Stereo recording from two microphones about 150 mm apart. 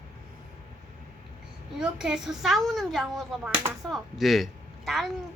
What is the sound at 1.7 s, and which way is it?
A woman's voice, 5° right (ahead or behind).